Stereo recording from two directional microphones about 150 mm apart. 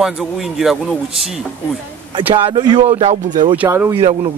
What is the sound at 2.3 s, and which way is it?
Speech, 30° right (ahead or behind).